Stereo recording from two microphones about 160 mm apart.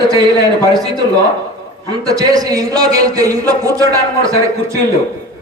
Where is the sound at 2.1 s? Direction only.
25° right (ahead or behind).